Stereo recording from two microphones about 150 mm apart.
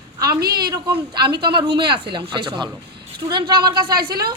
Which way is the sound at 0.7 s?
30° right (ahead or behind).